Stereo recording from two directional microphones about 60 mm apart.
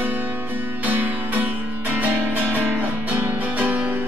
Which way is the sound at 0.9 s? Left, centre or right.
Right.